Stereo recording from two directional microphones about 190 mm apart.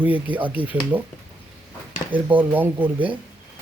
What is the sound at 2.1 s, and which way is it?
Speech, 10° right (ahead or behind).